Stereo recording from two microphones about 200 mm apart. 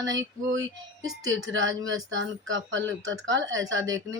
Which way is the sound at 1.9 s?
70° right (ahead or behind).